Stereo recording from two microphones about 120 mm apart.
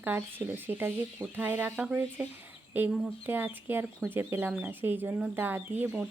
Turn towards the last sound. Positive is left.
turn(degrees=-10)  # may be behind; listen again after turning